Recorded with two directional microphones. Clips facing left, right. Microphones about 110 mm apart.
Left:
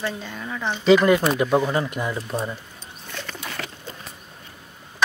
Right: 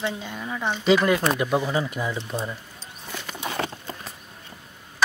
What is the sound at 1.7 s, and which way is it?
Speech, 45° left (ahead or behind).